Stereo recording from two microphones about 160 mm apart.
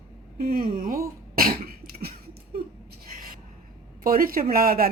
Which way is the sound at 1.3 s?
65° right (ahead or behind).